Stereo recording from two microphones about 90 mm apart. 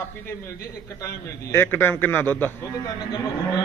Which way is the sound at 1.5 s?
25° left (ahead or behind).